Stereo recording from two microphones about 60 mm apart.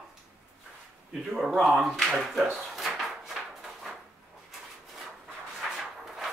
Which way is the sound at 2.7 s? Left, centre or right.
Centre.